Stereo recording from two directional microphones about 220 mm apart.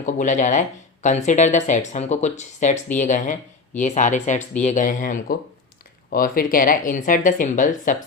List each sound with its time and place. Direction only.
0.0 s speech: 35° left (ahead or behind)